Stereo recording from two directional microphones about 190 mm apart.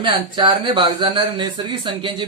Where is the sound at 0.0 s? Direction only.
25° right (ahead or behind).